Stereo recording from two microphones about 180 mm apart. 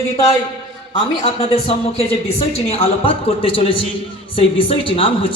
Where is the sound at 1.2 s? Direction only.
30° left (ahead or behind).